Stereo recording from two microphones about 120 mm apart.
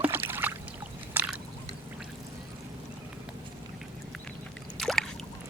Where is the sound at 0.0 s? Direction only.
20° right (ahead or behind).